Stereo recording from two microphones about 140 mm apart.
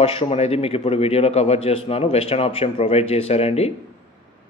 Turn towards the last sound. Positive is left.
turn(degrees=50)  # may be behind; listen again after turning